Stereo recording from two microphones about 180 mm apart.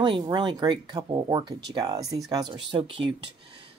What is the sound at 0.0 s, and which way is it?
Speech, 25° right (ahead or behind).